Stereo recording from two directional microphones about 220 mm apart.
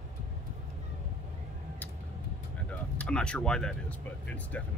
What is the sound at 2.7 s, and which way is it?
Speech, 5° left (ahead or behind).